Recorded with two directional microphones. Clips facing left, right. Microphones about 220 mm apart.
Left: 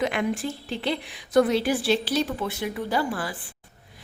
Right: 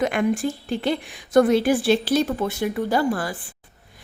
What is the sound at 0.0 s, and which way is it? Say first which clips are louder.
A woman's voice: right 4 dB; 50° right (ahead or behind).